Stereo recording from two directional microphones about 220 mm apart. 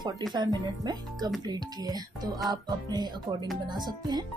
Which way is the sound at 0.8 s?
20° right (ahead or behind).